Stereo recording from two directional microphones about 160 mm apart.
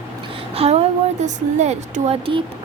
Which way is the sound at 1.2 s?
45° right (ahead or behind).